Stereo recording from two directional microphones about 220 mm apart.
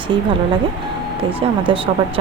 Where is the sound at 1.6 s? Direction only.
25° right (ahead or behind).